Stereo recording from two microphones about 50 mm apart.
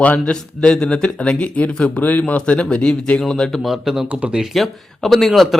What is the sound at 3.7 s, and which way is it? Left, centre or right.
Speech, centre.